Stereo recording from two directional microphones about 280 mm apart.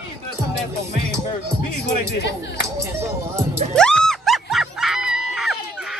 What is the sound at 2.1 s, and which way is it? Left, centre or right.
Speech, left.